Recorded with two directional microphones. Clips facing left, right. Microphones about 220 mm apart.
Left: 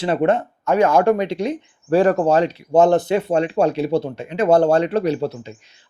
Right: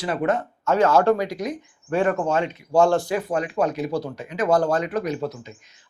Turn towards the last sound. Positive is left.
turn(degrees=30)  # may be behind; listen again after turning